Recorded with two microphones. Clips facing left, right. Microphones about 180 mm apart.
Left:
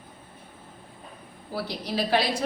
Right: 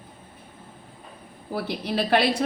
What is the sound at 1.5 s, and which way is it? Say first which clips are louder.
Speech: right 3 dB; 60° right (ahead or behind).